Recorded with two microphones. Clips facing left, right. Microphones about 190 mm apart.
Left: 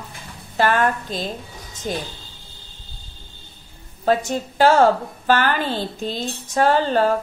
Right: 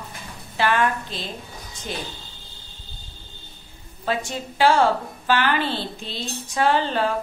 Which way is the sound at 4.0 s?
45° left (ahead or behind).